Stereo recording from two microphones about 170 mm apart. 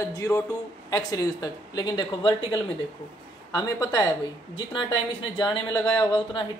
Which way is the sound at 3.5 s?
20° left (ahead or behind).